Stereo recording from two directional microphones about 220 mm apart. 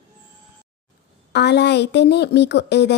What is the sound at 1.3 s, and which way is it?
A woman's voice, 50° left (ahead or behind).